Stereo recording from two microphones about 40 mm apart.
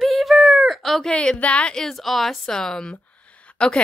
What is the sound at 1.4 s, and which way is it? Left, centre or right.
Speech, left.